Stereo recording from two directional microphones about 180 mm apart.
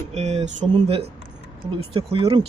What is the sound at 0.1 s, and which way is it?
Speech, 40° right (ahead or behind).